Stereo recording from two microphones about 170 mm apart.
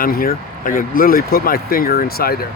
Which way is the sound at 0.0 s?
55° left (ahead or behind).